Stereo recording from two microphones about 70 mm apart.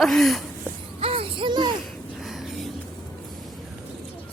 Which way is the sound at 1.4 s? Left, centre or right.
Right.